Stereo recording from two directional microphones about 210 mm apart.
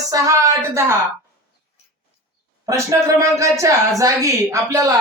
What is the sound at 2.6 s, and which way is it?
Speech, 15° right (ahead or behind).